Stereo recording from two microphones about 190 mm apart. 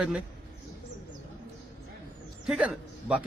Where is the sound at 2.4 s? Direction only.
Centre (ahead or behind).